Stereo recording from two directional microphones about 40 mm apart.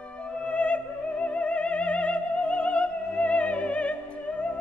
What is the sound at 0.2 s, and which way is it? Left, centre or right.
Music, left.